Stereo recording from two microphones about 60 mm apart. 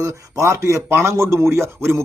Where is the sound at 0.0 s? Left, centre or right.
Right.